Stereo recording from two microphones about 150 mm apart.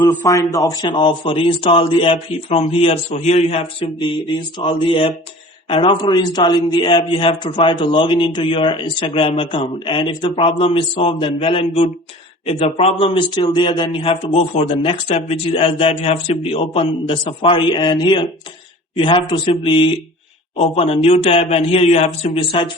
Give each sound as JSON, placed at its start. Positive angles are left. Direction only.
{"t": 0.3, "sound": "a man's voice", "side_deg": 20}